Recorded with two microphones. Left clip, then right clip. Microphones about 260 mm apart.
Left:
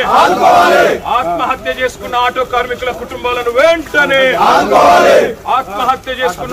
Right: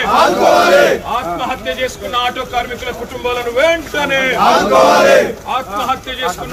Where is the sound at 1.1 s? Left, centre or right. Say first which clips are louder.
Left 5 dB; centre.